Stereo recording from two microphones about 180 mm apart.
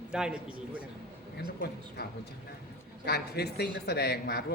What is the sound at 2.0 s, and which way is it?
Speech, 65° left (ahead or behind).